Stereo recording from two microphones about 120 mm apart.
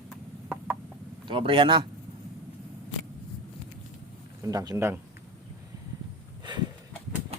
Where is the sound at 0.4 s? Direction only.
10° right (ahead or behind).